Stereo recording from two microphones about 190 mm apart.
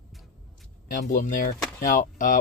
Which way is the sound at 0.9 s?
45° left (ahead or behind).